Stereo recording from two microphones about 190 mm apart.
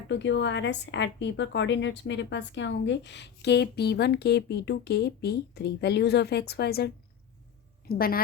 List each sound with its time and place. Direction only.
0.1 s a woman's voice: 70° left (ahead or behind); by 8.2 s 50° left (ahead or behind)